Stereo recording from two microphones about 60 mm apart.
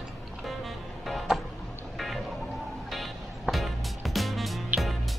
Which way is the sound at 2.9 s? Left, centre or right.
Centre.